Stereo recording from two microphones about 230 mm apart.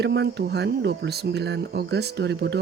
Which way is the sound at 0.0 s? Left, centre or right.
Right.